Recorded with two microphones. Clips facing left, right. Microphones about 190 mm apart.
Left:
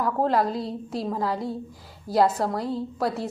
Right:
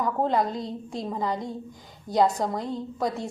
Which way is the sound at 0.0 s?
5° left (ahead or behind).